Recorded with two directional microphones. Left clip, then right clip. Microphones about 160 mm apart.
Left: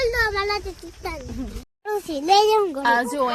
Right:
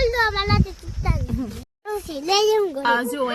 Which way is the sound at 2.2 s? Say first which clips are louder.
Left 2 dB; 25° left (ahead or behind).